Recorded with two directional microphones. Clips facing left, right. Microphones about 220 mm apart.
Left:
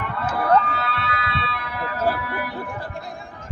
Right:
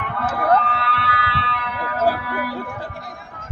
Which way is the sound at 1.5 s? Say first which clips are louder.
Right 2 dB; 60° right (ahead or behind).